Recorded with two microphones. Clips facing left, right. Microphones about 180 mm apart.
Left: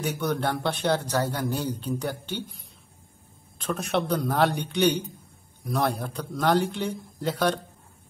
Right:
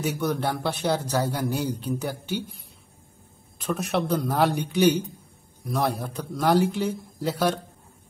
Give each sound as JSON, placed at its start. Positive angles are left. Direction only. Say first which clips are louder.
{"t": 0.0, "sound": "a man's voice", "louder": "right 1 dB", "side_deg": -5}
{"t": 3.6, "sound": "speech", "louder": "right 1 dB", "side_deg": 0}